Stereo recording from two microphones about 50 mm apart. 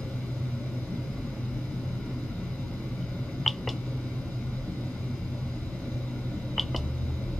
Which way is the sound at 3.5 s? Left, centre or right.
Centre.